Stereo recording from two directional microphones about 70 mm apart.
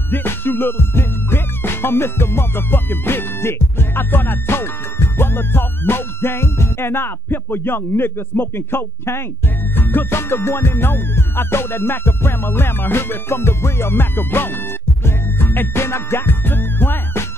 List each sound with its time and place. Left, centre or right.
0.1 s music: left